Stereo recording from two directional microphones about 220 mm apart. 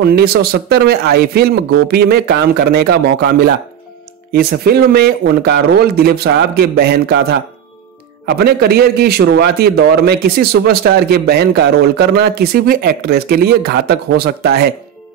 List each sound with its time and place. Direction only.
0.0 s a man's voice: 45° right (ahead or behind)
8.3 s a man's voice: 45° right (ahead or behind)